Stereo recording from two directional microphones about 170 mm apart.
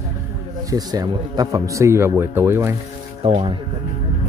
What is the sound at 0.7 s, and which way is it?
Speech, 20° right (ahead or behind).